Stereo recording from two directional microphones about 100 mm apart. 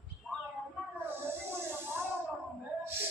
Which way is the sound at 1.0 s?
25° right (ahead or behind).